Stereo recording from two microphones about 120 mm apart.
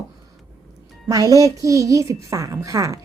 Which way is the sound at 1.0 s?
30° right (ahead or behind).